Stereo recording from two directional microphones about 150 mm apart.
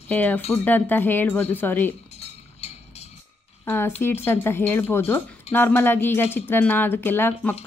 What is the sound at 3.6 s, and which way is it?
Speech, 15° left (ahead or behind).